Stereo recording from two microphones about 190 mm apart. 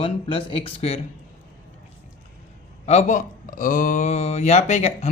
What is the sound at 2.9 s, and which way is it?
Speech, 40° left (ahead or behind).